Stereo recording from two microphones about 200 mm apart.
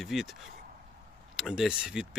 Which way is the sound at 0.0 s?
Centre (ahead or behind).